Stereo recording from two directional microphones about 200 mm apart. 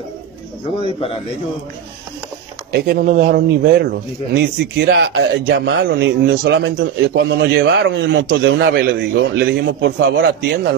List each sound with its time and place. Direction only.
0.8 s speech: 25° left (ahead or behind)
2.7 s speech: 50° right (ahead or behind)
8.5 s speech: 50° right (ahead or behind)